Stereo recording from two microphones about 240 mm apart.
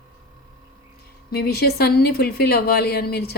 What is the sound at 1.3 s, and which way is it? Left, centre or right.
A woman's voice, left.